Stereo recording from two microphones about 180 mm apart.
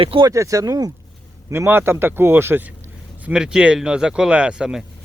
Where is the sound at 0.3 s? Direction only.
20° right (ahead or behind).